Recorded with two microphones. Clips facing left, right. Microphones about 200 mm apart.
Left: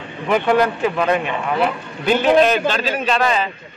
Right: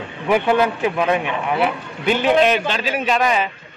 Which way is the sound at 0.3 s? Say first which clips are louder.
Even; 5° right (ahead or behind).